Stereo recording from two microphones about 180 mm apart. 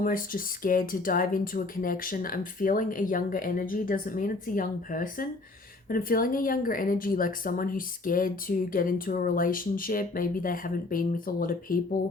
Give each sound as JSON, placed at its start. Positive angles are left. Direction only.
{"t": 0.0, "sound": "speech", "side_deg": 50}